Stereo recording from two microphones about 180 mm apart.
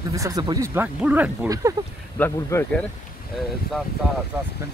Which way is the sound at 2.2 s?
15° left (ahead or behind).